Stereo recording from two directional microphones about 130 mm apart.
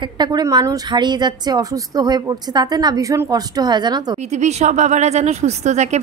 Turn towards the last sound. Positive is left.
turn(degrees=-60)  # may be behind; listen again after turning